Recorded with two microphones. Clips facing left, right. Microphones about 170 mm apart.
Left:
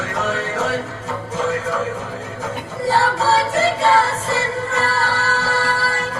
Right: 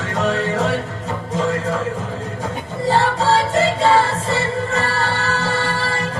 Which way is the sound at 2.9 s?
30° right (ahead or behind).